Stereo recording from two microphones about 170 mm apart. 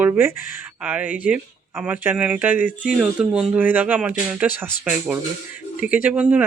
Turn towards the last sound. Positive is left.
turn(degrees=-10)  # may be behind; listen again after turning